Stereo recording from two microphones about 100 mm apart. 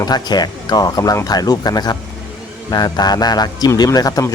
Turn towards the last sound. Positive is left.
turn(degrees=35)  # may be behind; listen again after turning